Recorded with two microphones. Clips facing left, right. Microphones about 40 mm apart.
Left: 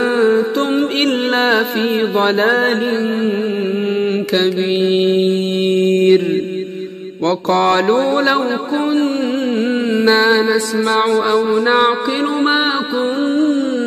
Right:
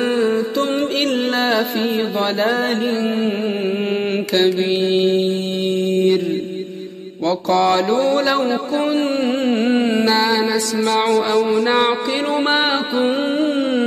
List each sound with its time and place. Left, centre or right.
0.2 s music: left
4.3 s mantra: centre
4.8 s mantra: centre
5.2 s mantra: left
7.2 s speech: left
9.0 s music: centre
10.0 s music: left
11.1 s mantra: left
11.7 s music: centre